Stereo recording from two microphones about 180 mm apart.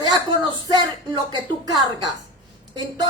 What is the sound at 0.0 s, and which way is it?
Speech, 25° right (ahead or behind).